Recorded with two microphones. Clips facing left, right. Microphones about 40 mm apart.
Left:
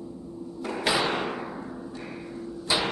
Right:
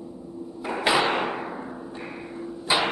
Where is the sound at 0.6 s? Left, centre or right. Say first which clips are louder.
Right 4 dB; right.